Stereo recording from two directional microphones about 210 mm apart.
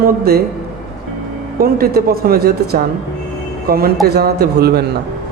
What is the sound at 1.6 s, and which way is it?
Speech, 45° right (ahead or behind).